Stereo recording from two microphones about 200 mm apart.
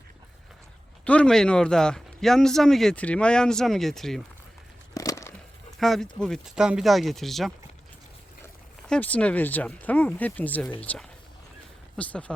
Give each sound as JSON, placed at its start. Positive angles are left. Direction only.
{"t": 1.0, "sound": "speech", "side_deg": 5}
{"t": 4.9, "sound": "a sound", "side_deg": 15}
{"t": 5.8, "sound": "speech", "side_deg": 0}
{"t": 8.9, "sound": "speech", "side_deg": 5}